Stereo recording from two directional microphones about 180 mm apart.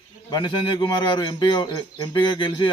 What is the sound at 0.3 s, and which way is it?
A man's voice, 25° left (ahead or behind).